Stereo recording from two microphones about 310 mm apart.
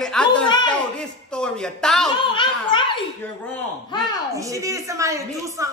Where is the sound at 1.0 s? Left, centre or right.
Centre.